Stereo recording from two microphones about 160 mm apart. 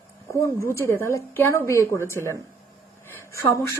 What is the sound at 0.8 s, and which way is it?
A woman's voice, 15° left (ahead or behind).